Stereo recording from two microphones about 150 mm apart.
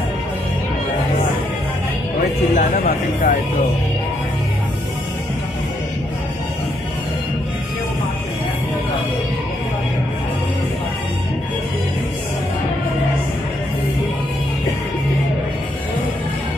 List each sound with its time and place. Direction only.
2.5 s speech: 65° left (ahead or behind)